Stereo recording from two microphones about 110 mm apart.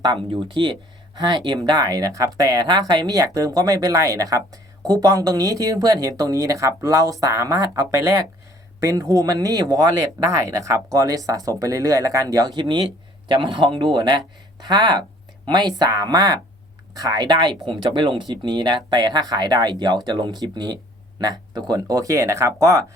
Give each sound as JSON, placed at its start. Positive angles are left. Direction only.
{"t": 0.0, "sound": "speech", "side_deg": -45}